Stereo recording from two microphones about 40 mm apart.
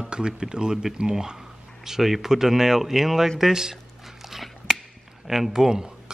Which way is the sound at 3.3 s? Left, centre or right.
Centre.